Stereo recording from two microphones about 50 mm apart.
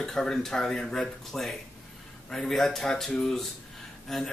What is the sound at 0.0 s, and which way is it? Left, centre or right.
Speech, centre.